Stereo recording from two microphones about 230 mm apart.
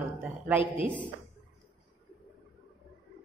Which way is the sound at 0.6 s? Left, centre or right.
Left.